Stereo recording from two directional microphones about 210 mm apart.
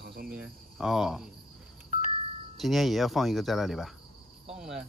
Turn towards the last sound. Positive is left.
turn(degrees=-5)  # may be behind; listen again after turning